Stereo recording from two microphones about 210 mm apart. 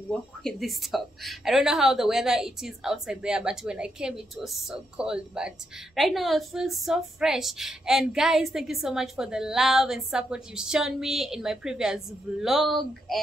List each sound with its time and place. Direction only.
0.1 s a woman's voice: 5° left (ahead or behind)